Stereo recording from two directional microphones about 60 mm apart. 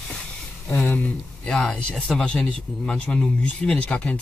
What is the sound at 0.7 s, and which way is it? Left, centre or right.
Speech, left.